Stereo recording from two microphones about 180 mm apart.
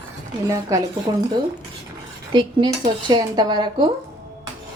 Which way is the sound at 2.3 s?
25° right (ahead or behind).